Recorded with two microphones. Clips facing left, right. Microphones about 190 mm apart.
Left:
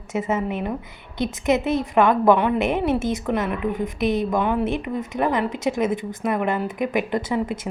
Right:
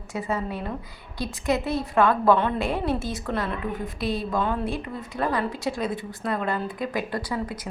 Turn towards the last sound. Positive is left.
turn(degrees=20)  # may be behind; listen again after turning